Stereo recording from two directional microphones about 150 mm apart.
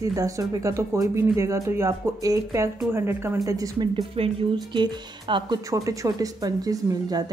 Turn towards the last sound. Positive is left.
turn(degrees=-25)  # may be behind; listen again after turning